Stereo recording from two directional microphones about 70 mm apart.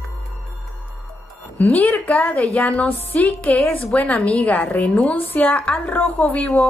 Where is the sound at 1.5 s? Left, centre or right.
Left.